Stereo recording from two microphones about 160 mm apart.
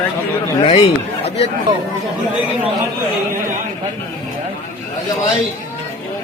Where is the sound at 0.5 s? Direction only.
40° left (ahead or behind).